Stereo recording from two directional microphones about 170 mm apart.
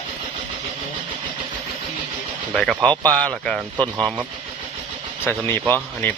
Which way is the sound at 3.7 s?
25° right (ahead or behind).